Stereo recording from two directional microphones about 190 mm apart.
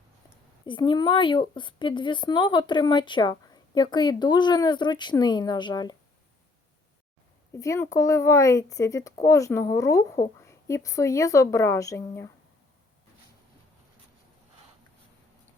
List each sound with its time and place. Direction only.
0.6 s speech: 25° left (ahead or behind)
7.5 s speech: 15° left (ahead or behind)